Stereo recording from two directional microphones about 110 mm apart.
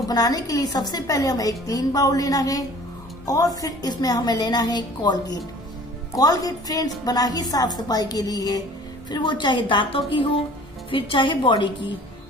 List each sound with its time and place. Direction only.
0.1 s a woman's voice: 35° left (ahead or behind); by 11.7 s 50° left (ahead or behind)